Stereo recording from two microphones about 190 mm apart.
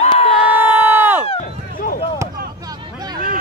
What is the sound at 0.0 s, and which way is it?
Crowd, 30° left (ahead or behind).